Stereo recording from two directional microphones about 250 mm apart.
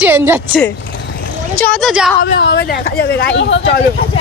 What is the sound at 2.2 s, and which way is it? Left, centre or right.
Speech, left.